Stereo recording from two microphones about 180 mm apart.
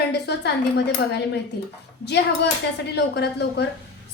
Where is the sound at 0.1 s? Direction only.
70° left (ahead or behind).